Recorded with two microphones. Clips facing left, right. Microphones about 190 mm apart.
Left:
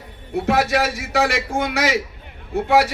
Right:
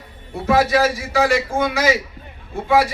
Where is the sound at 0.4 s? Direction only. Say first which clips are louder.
Right 3 dB; 70° left (ahead or behind).